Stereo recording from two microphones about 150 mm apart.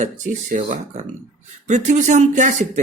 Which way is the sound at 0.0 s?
55° right (ahead or behind).